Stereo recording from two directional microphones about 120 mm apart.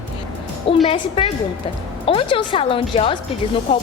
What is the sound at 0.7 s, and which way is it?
A woman's voice, 45° left (ahead or behind).